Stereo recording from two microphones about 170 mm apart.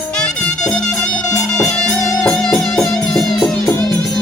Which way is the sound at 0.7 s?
Centre (ahead or behind).